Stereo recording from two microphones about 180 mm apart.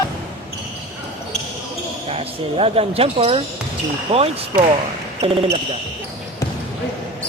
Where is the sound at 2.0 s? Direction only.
35° right (ahead or behind).